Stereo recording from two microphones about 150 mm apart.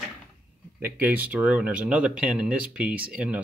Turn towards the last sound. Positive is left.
turn(degrees=-10)  # may be behind; listen again after turning